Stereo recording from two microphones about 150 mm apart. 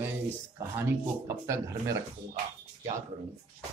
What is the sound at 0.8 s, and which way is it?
Speech, 20° right (ahead or behind).